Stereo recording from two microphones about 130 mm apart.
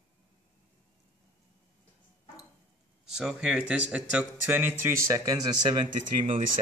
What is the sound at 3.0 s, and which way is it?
Speech, 5° right (ahead or behind).